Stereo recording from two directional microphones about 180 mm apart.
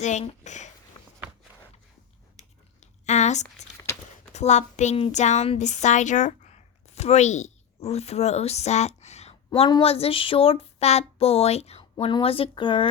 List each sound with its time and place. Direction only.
0.0 s speech: 40° left (ahead or behind)
2.8 s a sound: 40° left (ahead or behind)
4.3 s a woman's voice: 40° left (ahead or behind)
9.5 s child singing: 25° left (ahead or behind)